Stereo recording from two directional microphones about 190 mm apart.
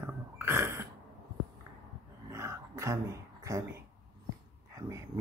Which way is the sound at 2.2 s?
15° right (ahead or behind).